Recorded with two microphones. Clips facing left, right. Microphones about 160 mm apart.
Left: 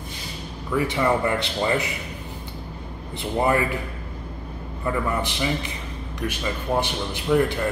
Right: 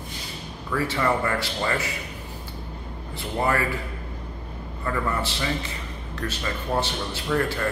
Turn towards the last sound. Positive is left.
turn(degrees=15)  # may be behind; listen again after turning